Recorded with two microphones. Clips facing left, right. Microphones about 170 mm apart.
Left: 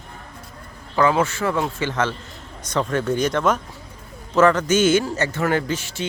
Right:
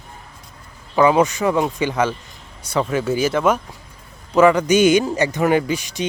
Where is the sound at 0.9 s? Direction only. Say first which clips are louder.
Right 4 dB; 15° right (ahead or behind).